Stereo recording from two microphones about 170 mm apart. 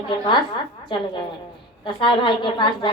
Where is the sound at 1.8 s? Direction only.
30° left (ahead or behind).